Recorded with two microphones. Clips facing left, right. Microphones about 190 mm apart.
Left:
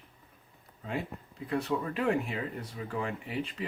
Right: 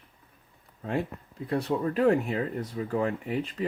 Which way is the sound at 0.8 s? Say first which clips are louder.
Right 6 dB; 50° right (ahead or behind).